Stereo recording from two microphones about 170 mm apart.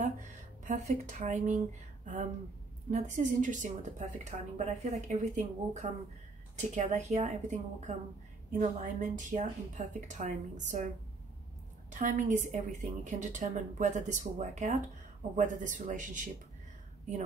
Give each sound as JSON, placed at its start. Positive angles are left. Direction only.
{"t": 0.0, "sound": "speech", "side_deg": -45}
{"t": 2.9, "sound": "a woman's voice", "side_deg": -50}
{"t": 11.9, "sound": "a woman's voice", "side_deg": -45}